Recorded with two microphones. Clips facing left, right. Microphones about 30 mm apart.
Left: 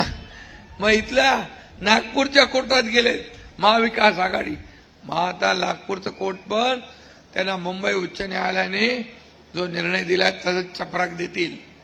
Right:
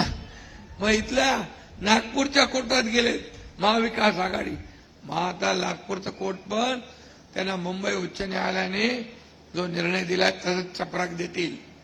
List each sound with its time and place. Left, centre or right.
0.8 s a man's voice: left
9.8 s a man's voice: centre